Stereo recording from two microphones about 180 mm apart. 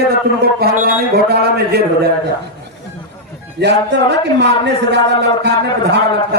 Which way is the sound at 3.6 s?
70° right (ahead or behind).